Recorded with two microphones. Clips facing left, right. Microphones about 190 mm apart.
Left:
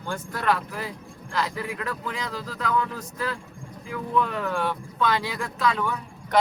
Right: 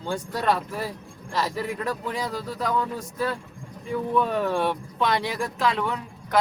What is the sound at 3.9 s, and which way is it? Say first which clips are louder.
Speech: right 3 dB; 30° right (ahead or behind).